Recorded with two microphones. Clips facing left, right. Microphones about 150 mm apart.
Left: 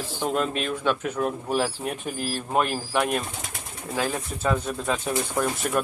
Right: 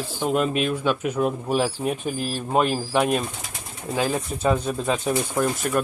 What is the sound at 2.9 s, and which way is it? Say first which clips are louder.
Speech: right 3 dB; 20° right (ahead or behind).